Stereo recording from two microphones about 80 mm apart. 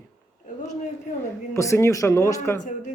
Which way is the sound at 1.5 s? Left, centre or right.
Left.